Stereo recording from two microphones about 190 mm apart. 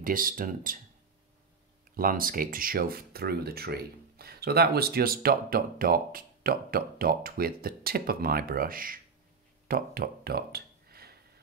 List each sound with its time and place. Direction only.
0.0 s speech: 45° right (ahead or behind)
2.0 s speech: 50° right (ahead or behind)
9.7 s a sound: 50° right (ahead or behind)